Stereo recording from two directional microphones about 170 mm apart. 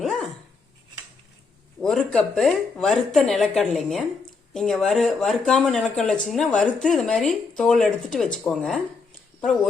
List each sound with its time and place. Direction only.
0.0 s dog: centre (ahead or behind)
1.8 s speech: 5° left (ahead or behind)